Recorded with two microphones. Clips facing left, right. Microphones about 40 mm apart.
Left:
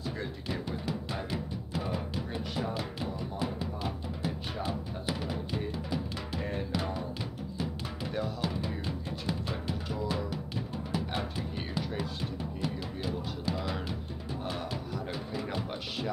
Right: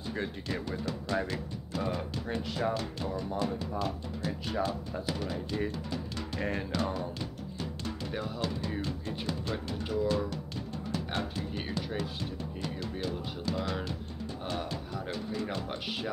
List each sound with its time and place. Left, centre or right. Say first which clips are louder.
0.5 s music: even; centre
2.2 s speech: right 3 dB; right
2.7 s music: right 2 dB; centre
8.4 s music: right 1 dB; centre